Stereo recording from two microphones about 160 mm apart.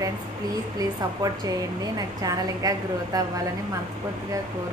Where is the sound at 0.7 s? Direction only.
25° right (ahead or behind).